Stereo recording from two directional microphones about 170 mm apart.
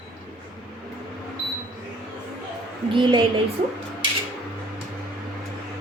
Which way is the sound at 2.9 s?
30° right (ahead or behind).